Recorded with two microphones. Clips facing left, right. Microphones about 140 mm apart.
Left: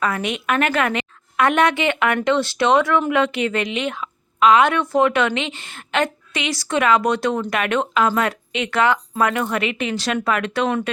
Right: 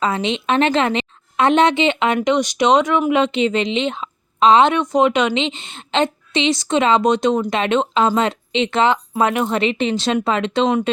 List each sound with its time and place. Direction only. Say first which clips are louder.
0.0 s a woman's voice: right 3 dB; 25° right (ahead or behind)